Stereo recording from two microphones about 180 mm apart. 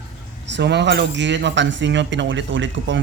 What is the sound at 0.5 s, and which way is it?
Speech, 70° right (ahead or behind).